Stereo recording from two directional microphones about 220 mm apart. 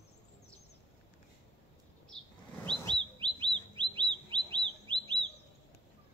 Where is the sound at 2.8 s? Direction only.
20° right (ahead or behind).